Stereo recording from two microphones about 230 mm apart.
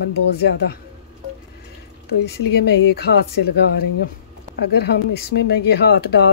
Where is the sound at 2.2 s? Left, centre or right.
Left.